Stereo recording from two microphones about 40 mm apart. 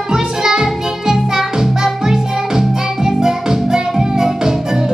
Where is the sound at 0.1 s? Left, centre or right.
Centre.